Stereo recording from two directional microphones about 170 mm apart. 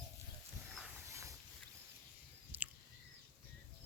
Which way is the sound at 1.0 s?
15° right (ahead or behind).